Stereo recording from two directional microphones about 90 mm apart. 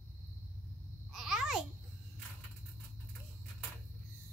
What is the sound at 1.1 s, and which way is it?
Babbling, 5° right (ahead or behind).